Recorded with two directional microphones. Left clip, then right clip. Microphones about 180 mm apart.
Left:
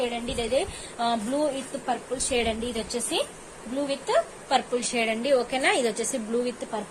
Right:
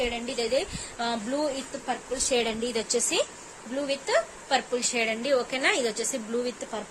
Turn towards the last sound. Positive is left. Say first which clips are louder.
# left 2 dB
turn(degrees=-15)  # may be behind; listen again after turning